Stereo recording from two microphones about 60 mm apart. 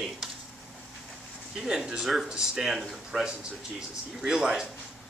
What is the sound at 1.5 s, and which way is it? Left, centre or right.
Speech, centre.